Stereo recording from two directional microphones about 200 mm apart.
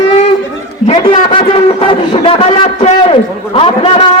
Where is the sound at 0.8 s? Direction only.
30° left (ahead or behind).